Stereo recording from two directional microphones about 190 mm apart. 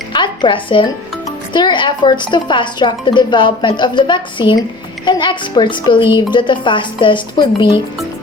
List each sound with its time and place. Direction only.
0.1 s music: 25° left (ahead or behind)
1.5 s speech: 25° left (ahead or behind)